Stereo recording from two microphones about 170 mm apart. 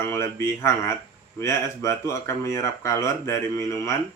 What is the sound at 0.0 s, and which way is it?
Speech, 15° left (ahead or behind).